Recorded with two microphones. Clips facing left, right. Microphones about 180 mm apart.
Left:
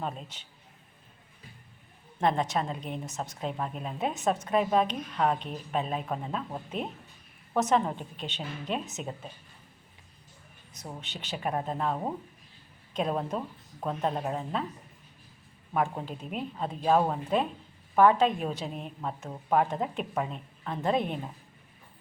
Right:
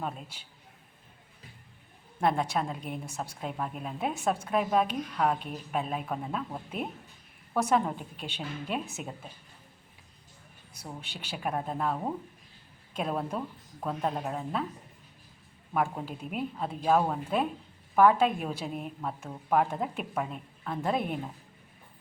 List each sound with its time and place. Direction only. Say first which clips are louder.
0.0 s a woman's voice: left 1 dB; 10° right (ahead or behind)
2.2 s a woman's voice: left 1 dB; 10° right (ahead or behind)
7.5 s a woman's voice: left 1 dB; 10° right (ahead or behind)
11.0 s speech: left 1 dB; 10° right (ahead or behind)
15.7 s a woman's voice: left 1 dB; 5° right (ahead or behind)